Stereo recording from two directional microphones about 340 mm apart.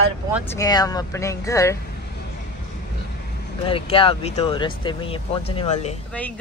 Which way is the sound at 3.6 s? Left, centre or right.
Centre.